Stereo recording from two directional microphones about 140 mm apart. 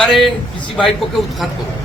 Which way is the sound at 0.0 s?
Centre (ahead or behind).